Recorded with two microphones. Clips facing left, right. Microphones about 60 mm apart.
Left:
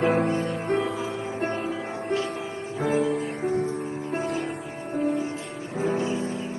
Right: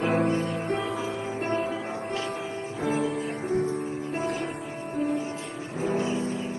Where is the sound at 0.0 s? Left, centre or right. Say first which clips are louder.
Left 2 dB; left.